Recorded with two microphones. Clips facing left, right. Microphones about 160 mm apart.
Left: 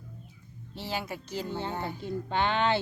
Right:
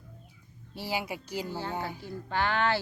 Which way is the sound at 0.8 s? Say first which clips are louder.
Right 1 dB; 10° right (ahead or behind).